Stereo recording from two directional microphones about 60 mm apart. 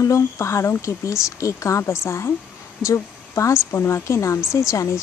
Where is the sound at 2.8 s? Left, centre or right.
Left.